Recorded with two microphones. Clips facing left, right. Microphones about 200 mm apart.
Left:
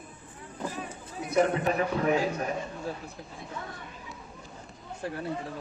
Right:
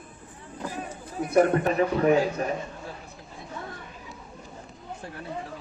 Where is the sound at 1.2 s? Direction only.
55° right (ahead or behind).